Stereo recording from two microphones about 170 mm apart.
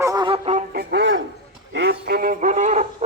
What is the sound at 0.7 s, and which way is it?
Speech, 90° right.